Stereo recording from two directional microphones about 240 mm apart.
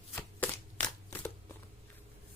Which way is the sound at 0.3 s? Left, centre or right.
Centre.